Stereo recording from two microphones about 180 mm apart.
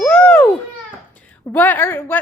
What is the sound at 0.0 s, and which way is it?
Babbling, 10° left (ahead or behind).